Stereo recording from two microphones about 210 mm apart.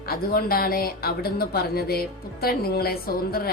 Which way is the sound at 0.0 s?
45° left (ahead or behind).